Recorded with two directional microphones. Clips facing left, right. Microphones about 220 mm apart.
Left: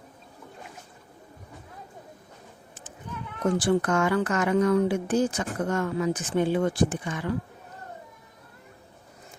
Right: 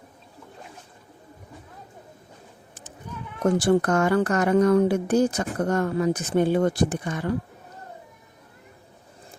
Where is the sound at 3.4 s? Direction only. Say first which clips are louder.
Right 3 dB; 40° right (ahead or behind).